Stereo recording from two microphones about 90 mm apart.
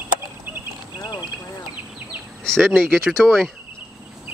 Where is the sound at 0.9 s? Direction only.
50° left (ahead or behind).